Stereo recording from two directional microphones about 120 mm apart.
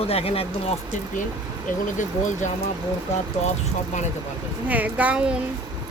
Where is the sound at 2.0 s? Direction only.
90° left.